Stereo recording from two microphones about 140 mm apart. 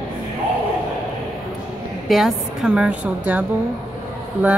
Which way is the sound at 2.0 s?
Centre (ahead or behind).